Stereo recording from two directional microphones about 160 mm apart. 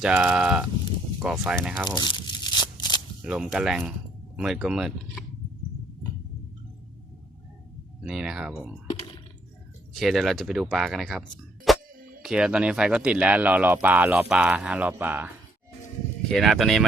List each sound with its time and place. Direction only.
0.0 s speech: 10° right (ahead or behind)
2.0 s tearing: 30° left (ahead or behind)
3.2 s speech: 5° right (ahead or behind)
8.0 s speech: 5° right (ahead or behind)
9.9 s speech: centre (ahead or behind)
11.7 s a sound: centre (ahead or behind)
12.2 s speech: 5° right (ahead or behind)
16.3 s speech: centre (ahead or behind)